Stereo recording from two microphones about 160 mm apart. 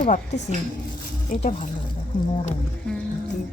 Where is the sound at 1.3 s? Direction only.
50° left (ahead or behind).